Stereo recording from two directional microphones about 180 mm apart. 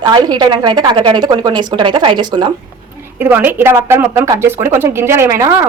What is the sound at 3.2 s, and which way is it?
A woman's voice, 10° right (ahead or behind).